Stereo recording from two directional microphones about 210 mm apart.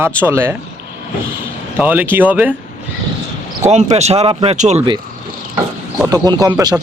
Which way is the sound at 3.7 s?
30° right (ahead or behind).